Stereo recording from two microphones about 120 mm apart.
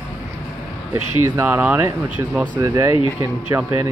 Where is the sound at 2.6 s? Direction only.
25° right (ahead or behind).